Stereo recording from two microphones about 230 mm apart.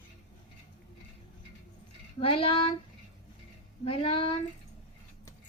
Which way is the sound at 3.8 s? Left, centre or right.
Left.